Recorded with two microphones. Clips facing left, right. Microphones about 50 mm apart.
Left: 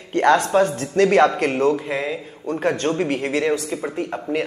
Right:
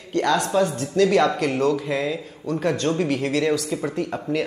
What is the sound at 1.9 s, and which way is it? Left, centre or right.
Speech, centre.